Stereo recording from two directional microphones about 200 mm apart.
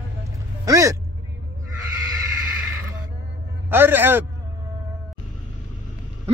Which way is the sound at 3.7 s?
10° right (ahead or behind).